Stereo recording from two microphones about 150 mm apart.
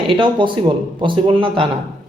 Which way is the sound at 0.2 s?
35° right (ahead or behind).